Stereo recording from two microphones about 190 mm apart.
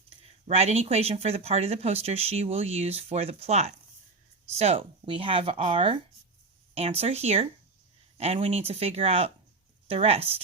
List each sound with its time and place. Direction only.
0.4 s speech: 35° right (ahead or behind)